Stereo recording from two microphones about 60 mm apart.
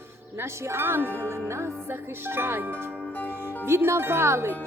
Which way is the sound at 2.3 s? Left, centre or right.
Right.